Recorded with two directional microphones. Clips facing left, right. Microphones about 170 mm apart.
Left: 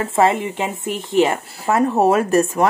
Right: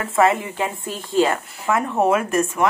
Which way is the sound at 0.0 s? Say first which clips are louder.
Left 1 dB; 30° left (ahead or behind).